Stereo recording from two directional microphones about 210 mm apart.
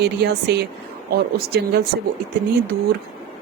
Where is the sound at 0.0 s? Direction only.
50° right (ahead or behind).